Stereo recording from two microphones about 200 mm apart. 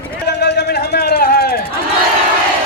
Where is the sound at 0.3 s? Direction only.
55° left (ahead or behind).